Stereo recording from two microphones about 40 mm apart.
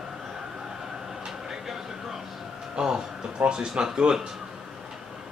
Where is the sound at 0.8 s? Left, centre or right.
Centre.